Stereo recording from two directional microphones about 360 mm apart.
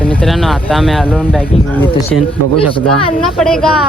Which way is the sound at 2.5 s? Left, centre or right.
Centre.